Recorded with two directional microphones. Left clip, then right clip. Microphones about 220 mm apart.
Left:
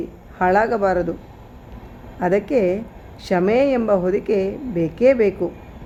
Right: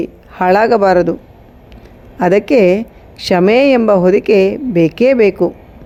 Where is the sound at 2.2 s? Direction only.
35° right (ahead or behind).